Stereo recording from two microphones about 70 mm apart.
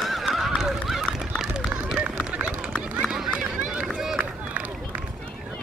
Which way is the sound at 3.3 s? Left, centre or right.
Centre.